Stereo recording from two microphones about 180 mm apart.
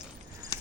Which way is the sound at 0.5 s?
20° left (ahead or behind).